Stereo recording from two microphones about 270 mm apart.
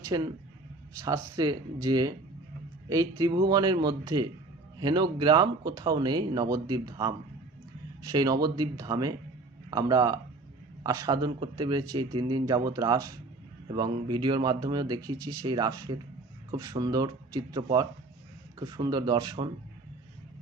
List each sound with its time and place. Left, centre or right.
0.1 s speech: centre